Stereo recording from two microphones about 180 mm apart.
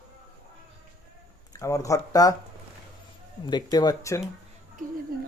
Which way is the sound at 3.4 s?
25° left (ahead or behind).